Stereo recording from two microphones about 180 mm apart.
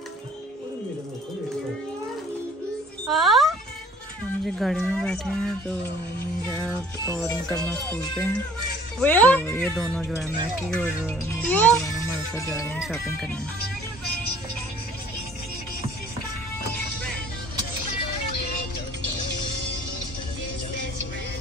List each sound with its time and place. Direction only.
3.1 s music: centre (ahead or behind)
4.5 s speech: centre (ahead or behind)
6.4 s music: 10° left (ahead or behind)
7.2 s speech: 5° left (ahead or behind)
12.8 s speech: centre (ahead or behind)